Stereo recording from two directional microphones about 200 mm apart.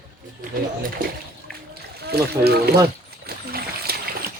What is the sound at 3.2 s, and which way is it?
Splash, 50° right (ahead or behind).